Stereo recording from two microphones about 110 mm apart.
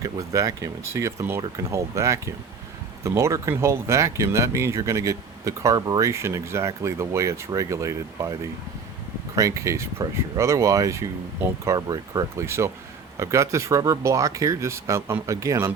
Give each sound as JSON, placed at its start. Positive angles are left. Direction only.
{"t": 0.0, "sound": "speech", "side_deg": -30}
{"t": 12.5, "sound": "speech", "side_deg": -25}